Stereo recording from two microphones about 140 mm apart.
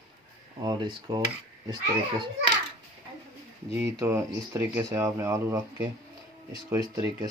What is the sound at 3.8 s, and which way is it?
Speech, 15° right (ahead or behind).